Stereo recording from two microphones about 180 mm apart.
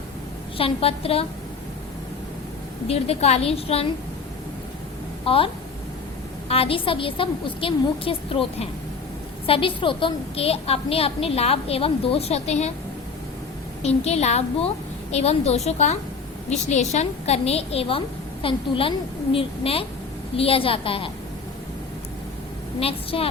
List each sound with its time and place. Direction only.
0.5 s a woman's voice: 30° left (ahead or behind)
2.8 s a woman's voice: 35° left (ahead or behind)
5.2 s a woman's voice: 30° left (ahead or behind)
6.5 s a woman's voice: 30° left (ahead or behind)
13.8 s a woman's voice: 35° left (ahead or behind)
22.8 s a woman's voice: 30° left (ahead or behind)